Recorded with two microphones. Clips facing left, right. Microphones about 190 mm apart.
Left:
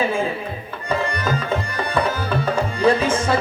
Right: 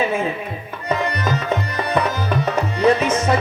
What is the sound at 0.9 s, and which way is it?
Music, 30° left (ahead or behind).